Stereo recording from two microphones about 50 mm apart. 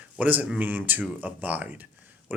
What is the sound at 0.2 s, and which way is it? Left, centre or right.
Speech, right.